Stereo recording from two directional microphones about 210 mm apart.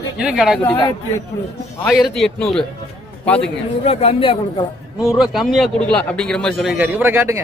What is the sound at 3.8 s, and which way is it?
Speech, 30° left (ahead or behind).